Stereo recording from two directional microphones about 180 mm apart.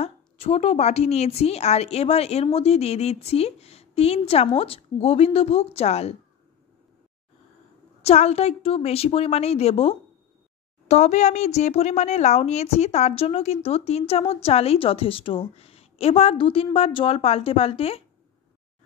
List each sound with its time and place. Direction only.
0.0 s a woman's voice: 35° left (ahead or behind)
8.0 s a woman's voice: 35° left (ahead or behind)